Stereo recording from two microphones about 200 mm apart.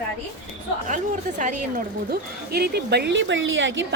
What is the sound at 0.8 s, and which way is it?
A woman's voice, 40° right (ahead or behind).